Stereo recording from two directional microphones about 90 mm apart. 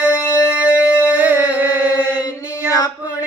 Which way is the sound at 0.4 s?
15° right (ahead or behind).